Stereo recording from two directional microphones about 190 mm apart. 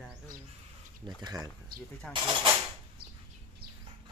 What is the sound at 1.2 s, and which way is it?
Speech, 20° right (ahead or behind).